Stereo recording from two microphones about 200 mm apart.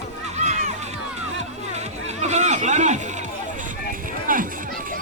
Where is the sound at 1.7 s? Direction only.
35° right (ahead or behind).